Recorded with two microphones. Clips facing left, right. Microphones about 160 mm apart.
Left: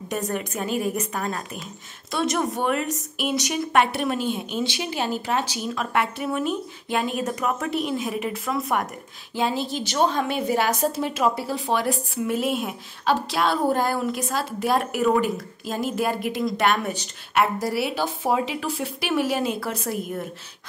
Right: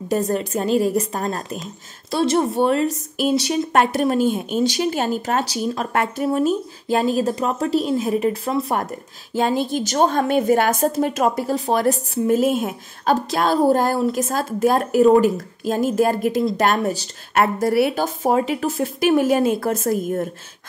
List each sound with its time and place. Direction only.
0.1 s a woman's voice: 35° right (ahead or behind)
9.3 s a woman's voice: 45° right (ahead or behind)
17.3 s a woman's voice: 50° right (ahead or behind)